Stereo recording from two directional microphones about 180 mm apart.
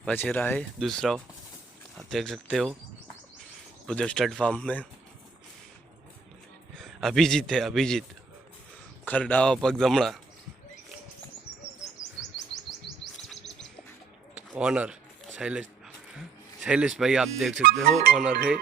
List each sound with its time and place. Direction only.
0.0 s speech: 5° left (ahead or behind)
3.8 s speech: 5° left (ahead or behind)
6.7 s a man's voice: centre (ahead or behind)
9.0 s speech: 10° left (ahead or behind)
11.5 s bird: 65° left (ahead or behind)
12.9 s chirp: 30° right (ahead or behind)
14.3 s a man's voice: 5° right (ahead or behind)
16.6 s speech: 5° right (ahead or behind)